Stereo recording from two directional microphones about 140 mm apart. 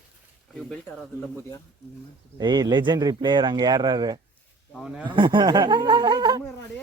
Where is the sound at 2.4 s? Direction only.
30° right (ahead or behind).